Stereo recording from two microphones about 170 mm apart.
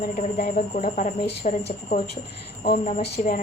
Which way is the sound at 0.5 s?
45° left (ahead or behind).